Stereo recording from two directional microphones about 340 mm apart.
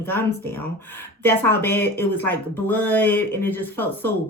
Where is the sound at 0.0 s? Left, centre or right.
Centre.